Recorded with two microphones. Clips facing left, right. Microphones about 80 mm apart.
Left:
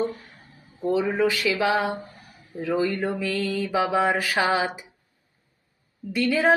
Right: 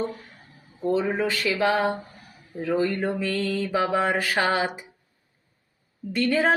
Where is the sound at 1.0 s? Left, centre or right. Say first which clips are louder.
Left 2 dB; right.